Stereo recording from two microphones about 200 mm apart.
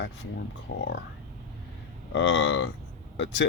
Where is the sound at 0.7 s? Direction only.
65° left (ahead or behind).